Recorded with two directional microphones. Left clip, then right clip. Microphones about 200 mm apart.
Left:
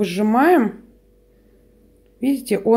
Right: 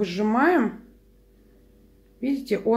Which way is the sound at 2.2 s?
45° left (ahead or behind).